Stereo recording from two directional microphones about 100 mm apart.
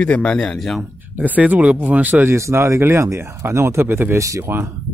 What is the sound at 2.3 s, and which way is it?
Speech, 30° right (ahead or behind).